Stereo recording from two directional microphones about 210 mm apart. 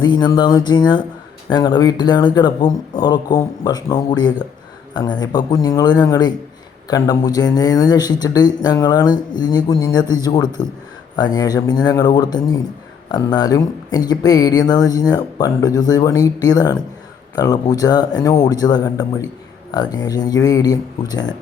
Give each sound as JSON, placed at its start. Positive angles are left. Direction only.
{"t": 0.0, "sound": "speech", "side_deg": 20}